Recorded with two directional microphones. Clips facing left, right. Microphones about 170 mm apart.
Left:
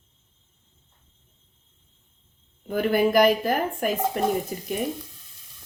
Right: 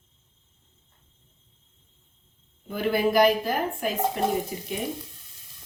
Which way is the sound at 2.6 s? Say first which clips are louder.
Left 3 dB; 50° left (ahead or behind).